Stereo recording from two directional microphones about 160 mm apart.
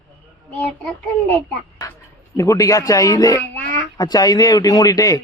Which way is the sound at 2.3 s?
20° left (ahead or behind).